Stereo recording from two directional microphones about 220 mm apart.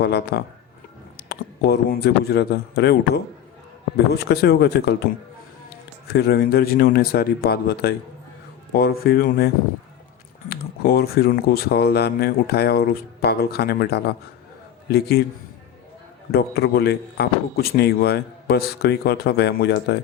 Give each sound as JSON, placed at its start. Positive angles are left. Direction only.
{"t": 0.0, "sound": "a man's voice", "side_deg": 45}
{"t": 6.1, "sound": "a man's voice", "side_deg": 50}
{"t": 10.5, "sound": "a man's voice", "side_deg": 45}
{"t": 16.3, "sound": "a man's voice", "side_deg": 45}